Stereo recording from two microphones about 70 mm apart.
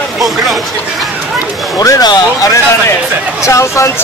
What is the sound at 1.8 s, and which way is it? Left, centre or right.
Speech, left.